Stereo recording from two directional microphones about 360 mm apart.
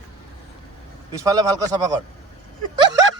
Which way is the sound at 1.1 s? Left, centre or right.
Centre.